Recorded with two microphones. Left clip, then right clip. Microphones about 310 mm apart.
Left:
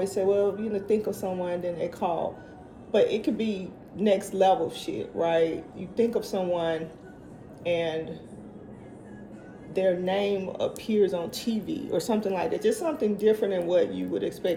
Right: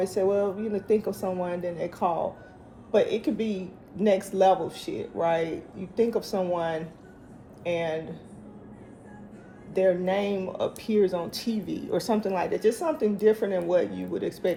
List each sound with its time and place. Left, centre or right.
0.0 s speech: centre
9.7 s speech: centre